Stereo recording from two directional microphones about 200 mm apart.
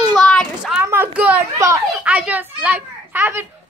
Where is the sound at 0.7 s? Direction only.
10° right (ahead or behind).